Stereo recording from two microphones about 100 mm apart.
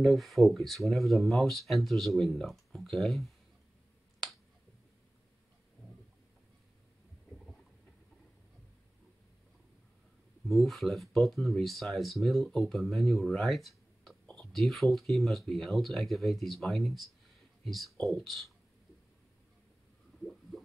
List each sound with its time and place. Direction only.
0.0 s speech: centre (ahead or behind)
10.5 s speech: centre (ahead or behind)